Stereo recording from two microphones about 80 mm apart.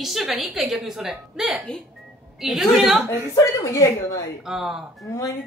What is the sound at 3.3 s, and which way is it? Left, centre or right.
Speech, left.